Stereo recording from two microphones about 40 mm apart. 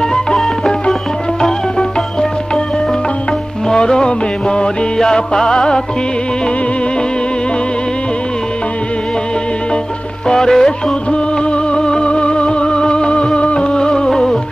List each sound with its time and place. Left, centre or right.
3.6 s music: centre
10.2 s music: centre
11.1 s music: left